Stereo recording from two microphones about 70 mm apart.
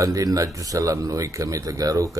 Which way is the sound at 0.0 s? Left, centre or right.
Right.